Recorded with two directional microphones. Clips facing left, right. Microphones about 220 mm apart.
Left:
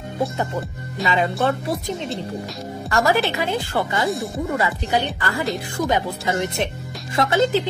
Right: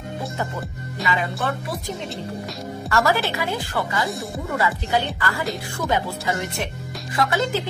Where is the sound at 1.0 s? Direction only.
25° left (ahead or behind).